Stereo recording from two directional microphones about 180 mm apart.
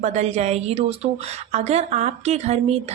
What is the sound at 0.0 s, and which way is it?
A woman's voice, 40° right (ahead or behind).